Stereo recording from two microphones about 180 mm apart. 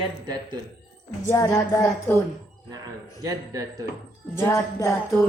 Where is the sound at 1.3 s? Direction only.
20° left (ahead or behind).